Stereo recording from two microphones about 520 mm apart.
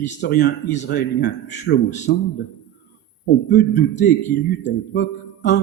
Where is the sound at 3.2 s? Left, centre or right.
Centre.